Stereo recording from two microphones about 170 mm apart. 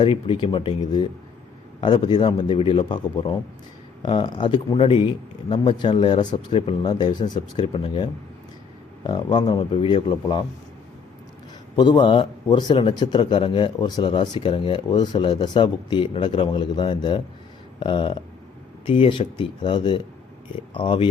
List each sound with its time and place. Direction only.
0.0 s a man's voice: 30° left (ahead or behind)
9.0 s a man's voice: 30° left (ahead or behind)
11.8 s a man's voice: 25° left (ahead or behind)